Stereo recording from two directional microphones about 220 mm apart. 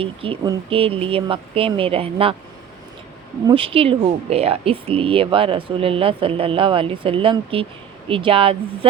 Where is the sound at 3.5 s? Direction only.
25° right (ahead or behind).